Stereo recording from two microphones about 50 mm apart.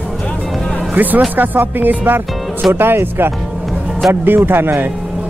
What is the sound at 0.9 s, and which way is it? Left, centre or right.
A man's voice, right.